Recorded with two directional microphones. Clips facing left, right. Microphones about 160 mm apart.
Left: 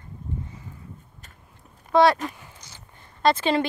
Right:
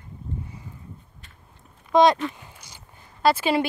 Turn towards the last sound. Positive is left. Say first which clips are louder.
# even
turn(degrees=-10)  # may be behind; listen again after turning